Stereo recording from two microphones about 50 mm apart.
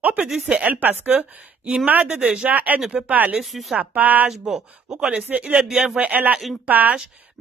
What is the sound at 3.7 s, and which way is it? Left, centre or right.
Speech, right.